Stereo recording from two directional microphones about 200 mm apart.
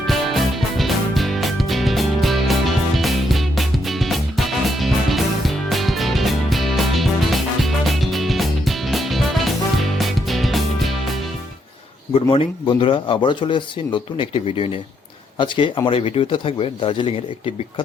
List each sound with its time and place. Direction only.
0.0 s music: centre (ahead or behind)
12.3 s speech: 25° left (ahead or behind)